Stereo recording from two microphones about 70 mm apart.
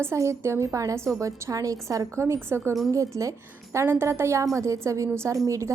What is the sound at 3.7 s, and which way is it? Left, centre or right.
A woman's voice, right.